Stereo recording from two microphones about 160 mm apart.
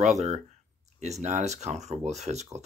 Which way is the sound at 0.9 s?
45° right (ahead or behind).